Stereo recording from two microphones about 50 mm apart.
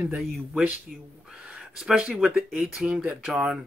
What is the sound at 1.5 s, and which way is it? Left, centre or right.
Speech, centre.